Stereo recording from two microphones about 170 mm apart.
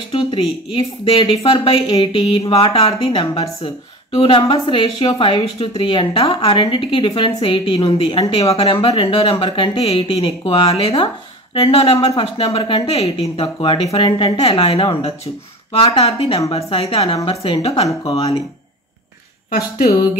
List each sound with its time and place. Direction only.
0.1 s a woman's voice: 30° left (ahead or behind)
19.5 s speech: 60° left (ahead or behind)